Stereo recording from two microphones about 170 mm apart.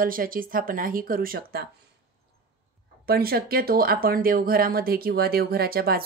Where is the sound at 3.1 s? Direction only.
60° right (ahead or behind).